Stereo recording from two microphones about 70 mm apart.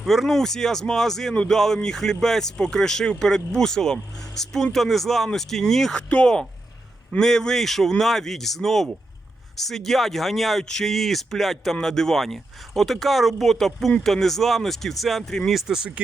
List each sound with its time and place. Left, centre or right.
0.0 s speech: centre
15.5 s speech: centre